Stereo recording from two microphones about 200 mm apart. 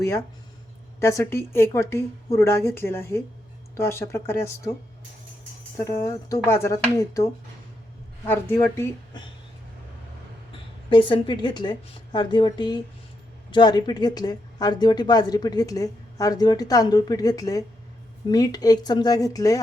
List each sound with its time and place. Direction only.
0.0 s speech: 15° left (ahead or behind)
5.7 s speech: 15° left (ahead or behind)
10.8 s speech: 25° left (ahead or behind)